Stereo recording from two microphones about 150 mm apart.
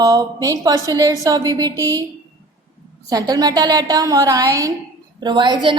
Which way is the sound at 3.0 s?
25° right (ahead or behind).